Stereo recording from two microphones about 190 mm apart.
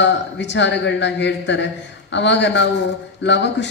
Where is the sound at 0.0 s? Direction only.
70° left (ahead or behind).